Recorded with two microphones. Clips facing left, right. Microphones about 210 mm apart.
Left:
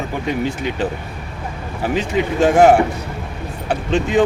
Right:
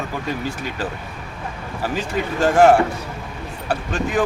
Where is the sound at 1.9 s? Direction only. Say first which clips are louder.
Left 6 dB; 20° left (ahead or behind).